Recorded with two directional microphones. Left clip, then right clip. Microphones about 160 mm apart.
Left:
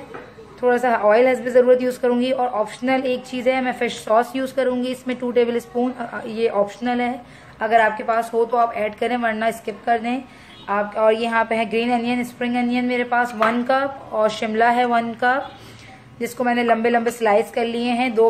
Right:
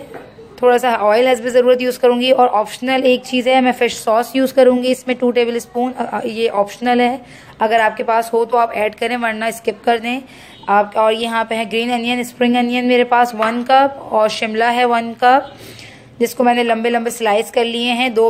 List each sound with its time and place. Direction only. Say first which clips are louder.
0.6 s speech: right 5 dB; 50° right (ahead or behind)